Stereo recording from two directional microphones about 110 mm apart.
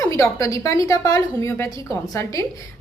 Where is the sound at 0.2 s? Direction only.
30° left (ahead or behind).